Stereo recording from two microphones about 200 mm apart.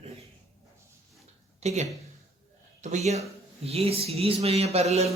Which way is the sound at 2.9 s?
35° right (ahead or behind).